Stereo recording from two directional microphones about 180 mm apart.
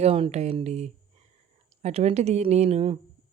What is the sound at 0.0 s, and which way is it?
A woman's voice, 35° right (ahead or behind).